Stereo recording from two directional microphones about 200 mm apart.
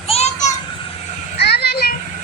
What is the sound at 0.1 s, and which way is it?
Children playing, 35° left (ahead or behind).